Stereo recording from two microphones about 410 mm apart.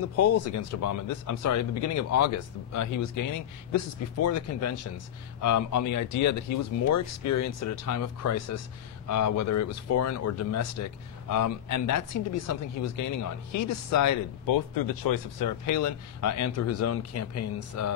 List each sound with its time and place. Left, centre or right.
0.0 s speech: left